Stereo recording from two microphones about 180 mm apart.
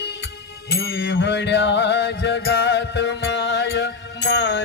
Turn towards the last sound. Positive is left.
turn(degrees=75)  # may be behind; listen again after turning